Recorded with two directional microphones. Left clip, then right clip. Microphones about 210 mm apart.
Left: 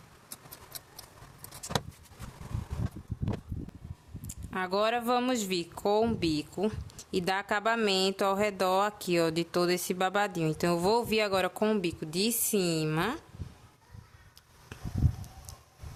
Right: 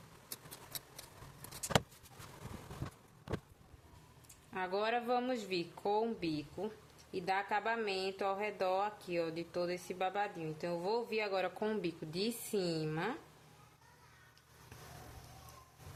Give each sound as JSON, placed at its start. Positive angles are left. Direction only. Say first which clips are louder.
{"t": 4.5, "sound": "speech", "louder": "left 7 dB", "side_deg": 30}